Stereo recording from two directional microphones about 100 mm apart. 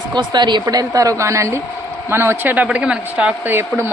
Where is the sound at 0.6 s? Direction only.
40° right (ahead or behind); by 3.5 s 10° right (ahead or behind).